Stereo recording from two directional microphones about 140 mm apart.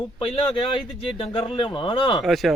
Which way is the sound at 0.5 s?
40° left (ahead or behind).